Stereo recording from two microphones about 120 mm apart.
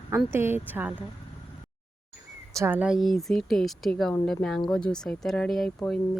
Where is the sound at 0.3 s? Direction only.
20° right (ahead or behind).